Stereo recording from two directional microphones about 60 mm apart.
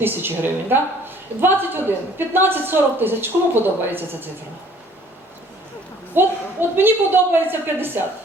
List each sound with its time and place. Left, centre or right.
0.0 s a woman's voice: right
6.1 s a woman's voice: right